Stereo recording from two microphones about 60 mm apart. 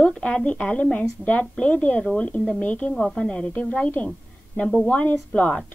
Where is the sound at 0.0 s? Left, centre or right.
Centre.